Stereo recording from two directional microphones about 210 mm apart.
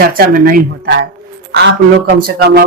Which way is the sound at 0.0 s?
45° right (ahead or behind).